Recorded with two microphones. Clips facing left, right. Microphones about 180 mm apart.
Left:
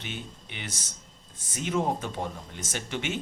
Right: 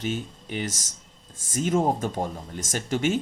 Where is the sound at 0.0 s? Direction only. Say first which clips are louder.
Right 9 dB; 40° right (ahead or behind).